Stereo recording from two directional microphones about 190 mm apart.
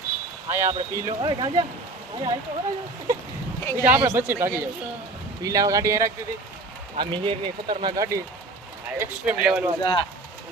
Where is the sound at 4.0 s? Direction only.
15° right (ahead or behind).